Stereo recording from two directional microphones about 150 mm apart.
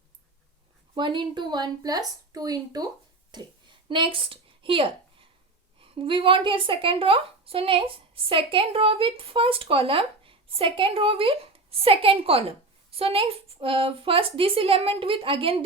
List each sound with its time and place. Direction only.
0.9 s a woman's voice: 30° right (ahead or behind)